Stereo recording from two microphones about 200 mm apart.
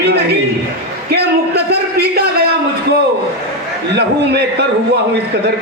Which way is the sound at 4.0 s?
55° right (ahead or behind).